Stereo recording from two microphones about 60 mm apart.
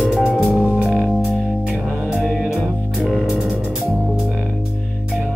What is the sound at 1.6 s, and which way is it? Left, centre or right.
Music, centre.